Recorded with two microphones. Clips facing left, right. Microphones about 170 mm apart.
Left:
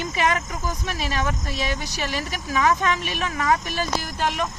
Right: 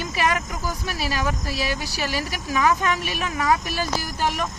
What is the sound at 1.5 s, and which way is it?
Speech, 5° right (ahead or behind).